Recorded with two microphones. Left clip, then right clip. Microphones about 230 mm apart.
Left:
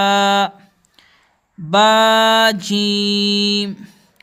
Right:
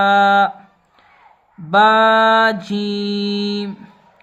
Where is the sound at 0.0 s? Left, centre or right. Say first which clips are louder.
Right 2 dB; left.